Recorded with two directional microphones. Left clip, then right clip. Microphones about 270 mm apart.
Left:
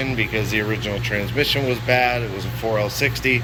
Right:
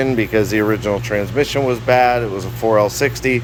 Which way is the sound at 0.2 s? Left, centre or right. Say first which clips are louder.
Right 6 dB; right.